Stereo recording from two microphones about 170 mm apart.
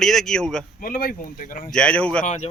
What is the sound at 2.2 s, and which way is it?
Speech, 45° left (ahead or behind).